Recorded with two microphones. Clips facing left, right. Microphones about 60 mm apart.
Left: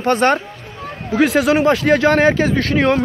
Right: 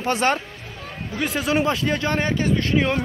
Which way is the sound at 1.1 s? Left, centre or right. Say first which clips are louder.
Left 9 dB; left.